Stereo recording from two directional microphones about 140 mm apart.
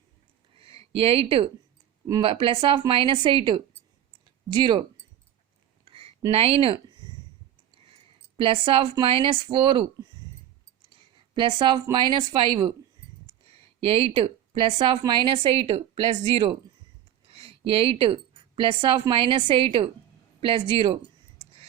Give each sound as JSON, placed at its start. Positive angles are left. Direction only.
{"t": 0.5, "sound": "a sound", "side_deg": -40}
{"t": 2.2, "sound": "a woman's voice", "side_deg": -40}
{"t": 5.8, "sound": "a sound", "side_deg": -40}
{"t": 6.3, "sound": "speech", "side_deg": -45}
{"t": 8.4, "sound": "a woman's voice", "side_deg": -40}
{"t": 11.3, "sound": "a woman's voice", "side_deg": -35}
{"t": 13.8, "sound": "a woman's voice", "side_deg": -45}